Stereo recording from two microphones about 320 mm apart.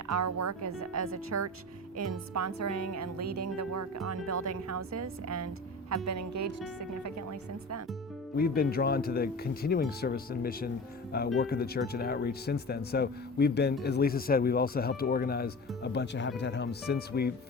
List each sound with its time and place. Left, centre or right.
0.1 s a woman's voice: right
8.4 s speech: left